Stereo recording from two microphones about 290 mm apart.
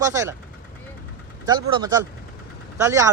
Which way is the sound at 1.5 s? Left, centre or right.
Centre.